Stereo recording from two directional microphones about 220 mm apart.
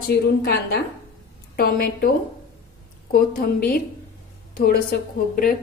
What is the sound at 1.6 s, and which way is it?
A woman's voice, 45° left (ahead or behind).